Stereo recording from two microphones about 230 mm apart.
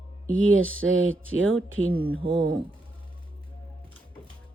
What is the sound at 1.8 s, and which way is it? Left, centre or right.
Speech, centre.